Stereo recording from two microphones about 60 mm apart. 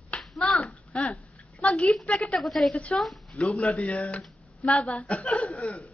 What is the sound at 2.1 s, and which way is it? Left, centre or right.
Speech, centre.